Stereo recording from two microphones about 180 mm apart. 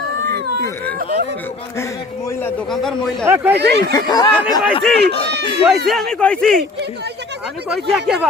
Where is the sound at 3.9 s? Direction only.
20° left (ahead or behind).